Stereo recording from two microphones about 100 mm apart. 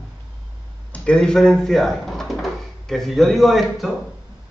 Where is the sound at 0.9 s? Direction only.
10° left (ahead or behind).